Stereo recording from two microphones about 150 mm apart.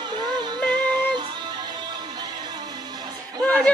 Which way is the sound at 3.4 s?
10° left (ahead or behind).